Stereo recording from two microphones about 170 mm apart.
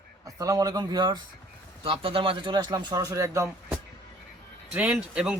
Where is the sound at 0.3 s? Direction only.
20° right (ahead or behind).